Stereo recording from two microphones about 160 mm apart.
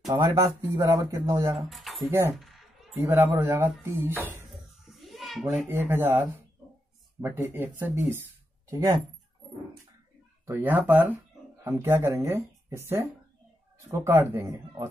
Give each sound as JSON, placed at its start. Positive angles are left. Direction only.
{"t": 0.0, "sound": "speech", "side_deg": -20}
{"t": 1.7, "sound": "a sound", "side_deg": 0}
{"t": 2.0, "sound": "speech", "side_deg": -15}
{"t": 4.5, "sound": "a sound", "side_deg": 0}
{"t": 5.7, "sound": "speech", "side_deg": -15}
{"t": 10.4, "sound": "speech", "side_deg": -10}